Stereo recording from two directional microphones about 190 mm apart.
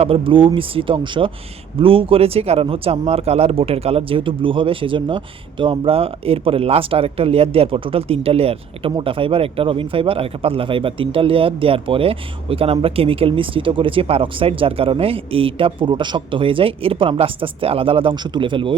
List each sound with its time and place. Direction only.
0.0 s speech: 30° right (ahead or behind)